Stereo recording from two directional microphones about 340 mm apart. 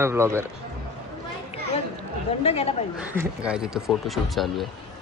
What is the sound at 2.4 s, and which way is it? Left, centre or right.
Speech, centre.